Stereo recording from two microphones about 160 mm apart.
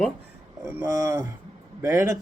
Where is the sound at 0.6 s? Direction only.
15° right (ahead or behind).